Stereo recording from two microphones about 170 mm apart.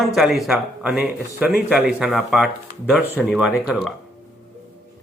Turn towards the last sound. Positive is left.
turn(degrees=0)  # may be behind; listen again after turning